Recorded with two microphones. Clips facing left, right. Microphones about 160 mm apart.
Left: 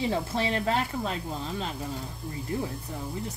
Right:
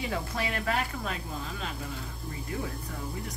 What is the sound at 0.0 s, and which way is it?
Speech, 30° left (ahead or behind).